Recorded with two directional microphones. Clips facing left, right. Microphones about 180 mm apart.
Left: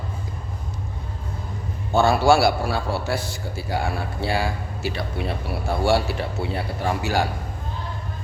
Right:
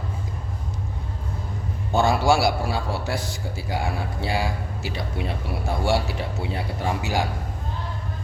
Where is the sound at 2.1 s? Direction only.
15° right (ahead or behind).